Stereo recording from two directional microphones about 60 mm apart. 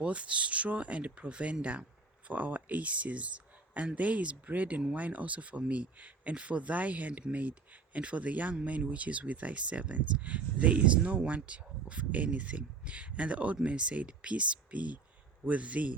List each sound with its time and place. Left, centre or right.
0.0 s speech: right